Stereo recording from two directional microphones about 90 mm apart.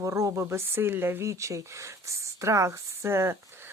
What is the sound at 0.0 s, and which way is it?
Speech, 35° right (ahead or behind).